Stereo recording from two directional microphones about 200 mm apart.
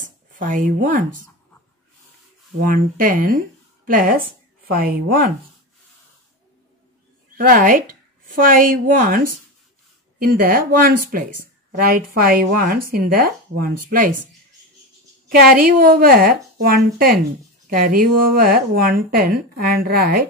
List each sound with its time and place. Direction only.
0.4 s speech: 40° right (ahead or behind)
2.7 s speech: 45° right (ahead or behind)
7.3 s speech: 45° right (ahead or behind)
15.2 s speech: 45° right (ahead or behind)